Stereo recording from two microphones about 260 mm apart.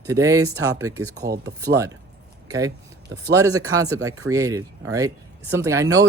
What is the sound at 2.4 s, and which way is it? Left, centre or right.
Speech, centre.